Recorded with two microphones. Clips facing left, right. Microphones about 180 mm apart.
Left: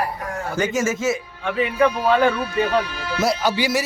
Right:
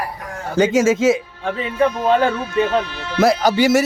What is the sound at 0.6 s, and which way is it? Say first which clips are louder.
Speech: right 8 dB; 90° right.